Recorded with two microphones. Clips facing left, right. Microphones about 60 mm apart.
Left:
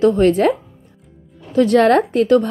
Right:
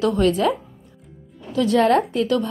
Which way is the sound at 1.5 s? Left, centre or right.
Left.